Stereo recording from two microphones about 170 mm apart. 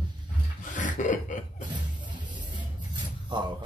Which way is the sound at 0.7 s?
50° left (ahead or behind).